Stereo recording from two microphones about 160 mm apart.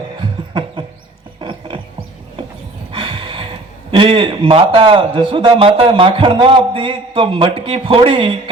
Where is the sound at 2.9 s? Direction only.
30° right (ahead or behind).